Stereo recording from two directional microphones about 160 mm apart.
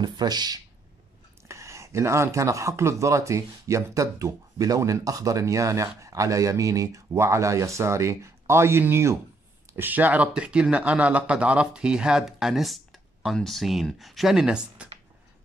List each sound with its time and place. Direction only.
0.0 s speech: 25° right (ahead or behind); by 14.9 s 5° right (ahead or behind)